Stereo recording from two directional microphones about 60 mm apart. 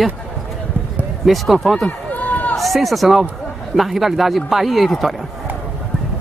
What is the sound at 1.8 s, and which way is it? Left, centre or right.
Run, left.